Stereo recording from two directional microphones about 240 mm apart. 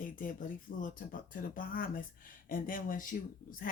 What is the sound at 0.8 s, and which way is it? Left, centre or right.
Speech, left.